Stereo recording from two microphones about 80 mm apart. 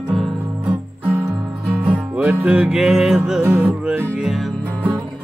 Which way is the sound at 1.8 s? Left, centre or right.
Centre.